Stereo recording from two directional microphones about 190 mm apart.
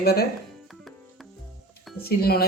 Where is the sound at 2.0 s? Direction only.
55° left (ahead or behind).